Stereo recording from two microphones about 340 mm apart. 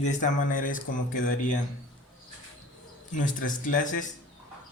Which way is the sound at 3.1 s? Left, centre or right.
Left.